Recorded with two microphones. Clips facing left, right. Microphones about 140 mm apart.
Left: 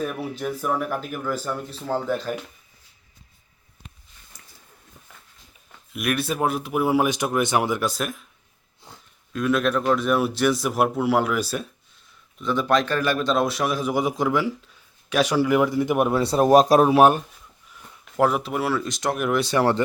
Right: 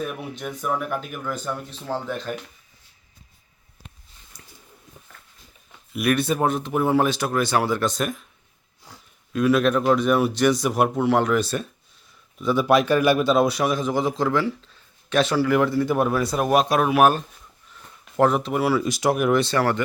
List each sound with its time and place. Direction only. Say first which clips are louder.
0.0 s speech: left 3 dB; centre (ahead or behind)
5.9 s a man's voice: right 4 dB; centre (ahead or behind)
8.9 s a sound: even; 25° left (ahead or behind)
9.3 s speech: right 3 dB; centre (ahead or behind)
12.4 s a man's voice: right 3 dB; 5° right (ahead or behind); by 17.2 s 30° left (ahead or behind)
18.2 s speech: right 2 dB; 5° left (ahead or behind)
19.4 s a man's voice: even; 10° left (ahead or behind)